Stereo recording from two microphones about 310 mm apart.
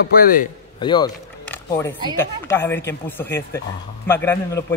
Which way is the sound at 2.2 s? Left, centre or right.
Centre.